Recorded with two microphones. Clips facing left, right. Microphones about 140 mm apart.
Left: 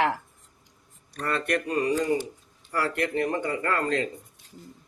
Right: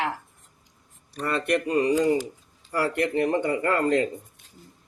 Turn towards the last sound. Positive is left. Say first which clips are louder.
# right 4 dB
turn(degrees=-25)  # may be behind; listen again after turning